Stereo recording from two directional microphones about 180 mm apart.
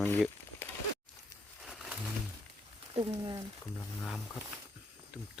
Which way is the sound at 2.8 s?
25° right (ahead or behind).